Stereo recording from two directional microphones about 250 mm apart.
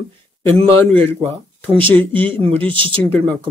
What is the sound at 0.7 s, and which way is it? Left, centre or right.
A man's voice, centre.